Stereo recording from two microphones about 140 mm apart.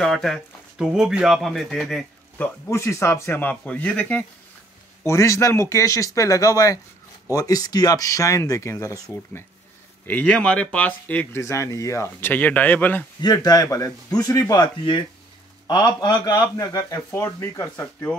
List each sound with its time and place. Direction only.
0.0 s speech: 5° left (ahead or behind)
2.3 s speech: 15° left (ahead or behind)
5.0 s speech: 20° left (ahead or behind)
10.0 s speech: 10° left (ahead or behind)
13.2 s speech: 25° left (ahead or behind)